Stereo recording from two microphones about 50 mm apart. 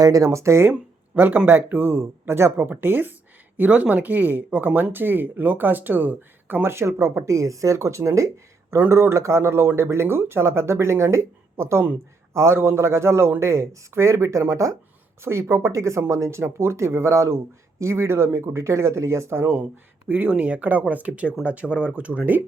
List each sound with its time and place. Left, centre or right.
0.3 s speech: right
1.1 s speech: right
2.0 s speech: right
2.6 s speech: right
3.6 s speech: right
7.3 s speech: right
8.9 s speech: right
12.3 s speech: right
15.2 s speech: right
20.1 s speech: right
20.3 s speech: right